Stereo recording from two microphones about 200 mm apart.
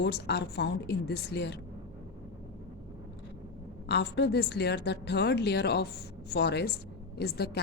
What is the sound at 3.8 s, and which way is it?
A woman's voice, 60° left (ahead or behind).